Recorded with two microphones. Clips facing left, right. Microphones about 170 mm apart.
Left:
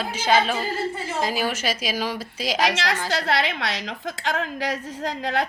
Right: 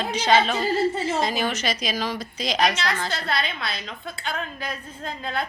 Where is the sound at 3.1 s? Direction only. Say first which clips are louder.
Left 4 dB; 90° left.